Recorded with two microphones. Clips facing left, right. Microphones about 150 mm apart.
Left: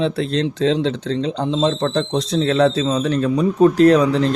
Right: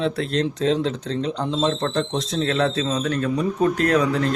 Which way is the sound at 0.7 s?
90° left.